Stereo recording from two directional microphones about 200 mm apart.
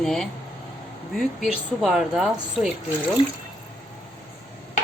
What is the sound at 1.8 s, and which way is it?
Speech, centre (ahead or behind).